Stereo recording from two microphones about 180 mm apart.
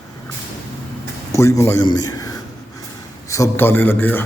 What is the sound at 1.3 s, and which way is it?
A man's voice, 15° left (ahead or behind).